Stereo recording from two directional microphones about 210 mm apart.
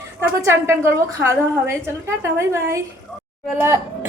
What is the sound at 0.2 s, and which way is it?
A woman's voice, 10° right (ahead or behind).